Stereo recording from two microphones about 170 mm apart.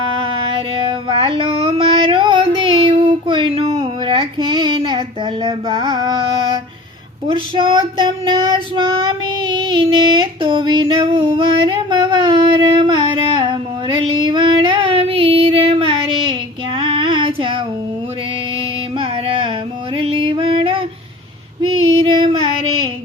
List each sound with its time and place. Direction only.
0.0 s music: 30° right (ahead or behind)
7.3 s child singing: 30° right (ahead or behind)
18.9 s carnatic music: 30° right (ahead or behind)
20.0 s music: 30° right (ahead or behind)
21.6 s female singing: 30° right (ahead or behind)